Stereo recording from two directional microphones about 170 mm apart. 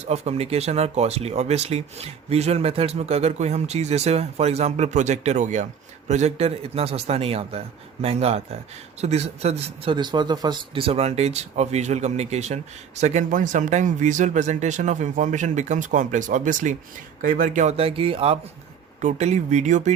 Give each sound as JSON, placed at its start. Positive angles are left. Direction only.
{"t": 0.0, "sound": "speech", "side_deg": -40}